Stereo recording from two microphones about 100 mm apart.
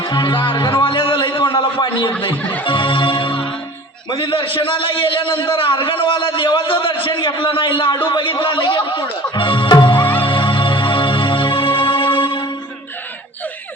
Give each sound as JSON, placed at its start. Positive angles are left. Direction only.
{"t": 0.0, "sound": "a man's voice", "side_deg": 50}
{"t": 2.3, "sound": "music", "side_deg": 15}
{"t": 2.6, "sound": "music", "side_deg": 55}
{"t": 4.1, "sound": "a man's voice", "side_deg": 55}
{"t": 10.2, "sound": "music", "side_deg": 60}